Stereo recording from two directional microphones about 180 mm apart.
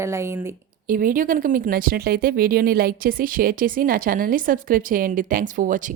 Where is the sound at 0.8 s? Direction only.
50° right (ahead or behind).